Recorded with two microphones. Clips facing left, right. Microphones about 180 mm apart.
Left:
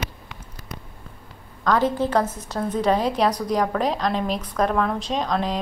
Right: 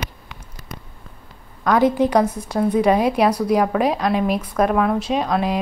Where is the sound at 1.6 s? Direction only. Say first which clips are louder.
Right 4 dB; 15° right (ahead or behind).